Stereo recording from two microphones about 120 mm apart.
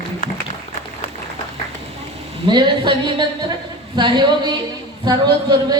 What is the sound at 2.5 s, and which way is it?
Speech, 40° right (ahead or behind).